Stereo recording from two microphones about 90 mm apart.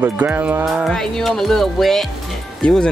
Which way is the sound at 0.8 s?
5° left (ahead or behind).